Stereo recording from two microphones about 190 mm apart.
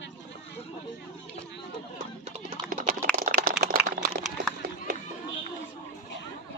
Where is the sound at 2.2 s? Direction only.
45° right (ahead or behind).